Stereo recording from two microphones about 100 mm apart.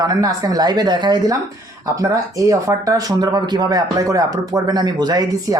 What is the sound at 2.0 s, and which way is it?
Speech, 30° right (ahead or behind).